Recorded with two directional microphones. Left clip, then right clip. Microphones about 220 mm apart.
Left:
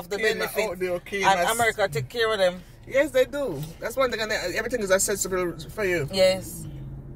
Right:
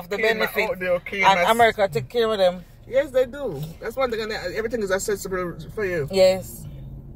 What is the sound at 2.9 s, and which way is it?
Speech, 25° left (ahead or behind).